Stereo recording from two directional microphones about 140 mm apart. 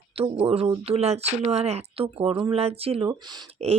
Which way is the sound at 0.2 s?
45° right (ahead or behind).